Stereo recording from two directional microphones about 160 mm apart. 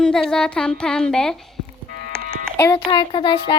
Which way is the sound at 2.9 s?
30° left (ahead or behind).